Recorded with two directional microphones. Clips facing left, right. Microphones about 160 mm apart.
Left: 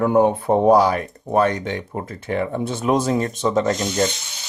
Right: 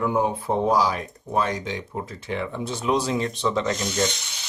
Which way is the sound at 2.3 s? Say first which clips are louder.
Left 7 dB; 50° left (ahead or behind).